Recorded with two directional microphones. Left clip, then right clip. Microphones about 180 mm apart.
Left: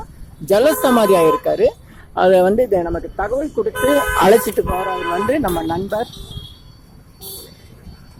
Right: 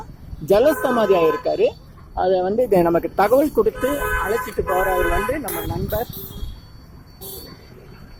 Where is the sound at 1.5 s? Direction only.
5° left (ahead or behind).